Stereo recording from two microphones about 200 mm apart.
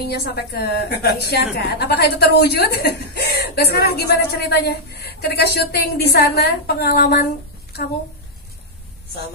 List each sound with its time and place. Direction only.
0.0 s a woman's voice: 55° left (ahead or behind)